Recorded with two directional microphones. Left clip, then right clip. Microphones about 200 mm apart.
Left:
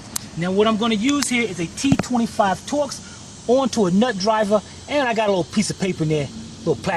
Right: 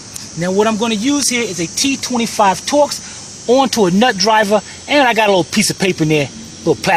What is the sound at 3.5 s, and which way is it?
Speech, 30° right (ahead or behind).